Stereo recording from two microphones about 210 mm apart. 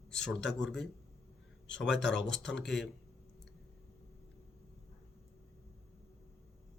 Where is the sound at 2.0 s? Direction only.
55° left (ahead or behind).